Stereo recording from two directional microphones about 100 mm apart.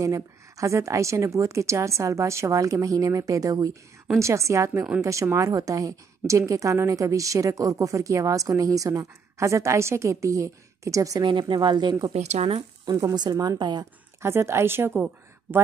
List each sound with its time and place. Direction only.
0.0 s a woman's voice: 30° right (ahead or behind)
11.2 s speech: 50° right (ahead or behind)
12.1 s speech: 80° right
13.1 s speech: 45° right (ahead or behind)
14.2 s a woman's voice: 25° right (ahead or behind)